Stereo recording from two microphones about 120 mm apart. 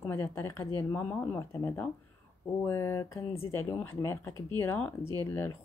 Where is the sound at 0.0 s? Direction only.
20° left (ahead or behind).